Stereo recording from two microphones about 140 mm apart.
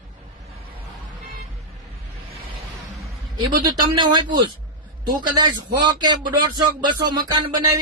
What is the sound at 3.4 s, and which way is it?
A man's voice, 30° right (ahead or behind).